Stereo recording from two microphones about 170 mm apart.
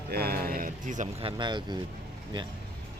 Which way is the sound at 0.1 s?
65° right (ahead or behind).